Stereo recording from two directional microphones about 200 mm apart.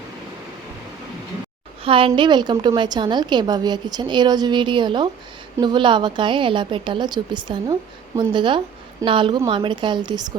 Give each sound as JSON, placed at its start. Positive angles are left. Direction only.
{"t": 1.8, "sound": "a woman's voice", "side_deg": -25}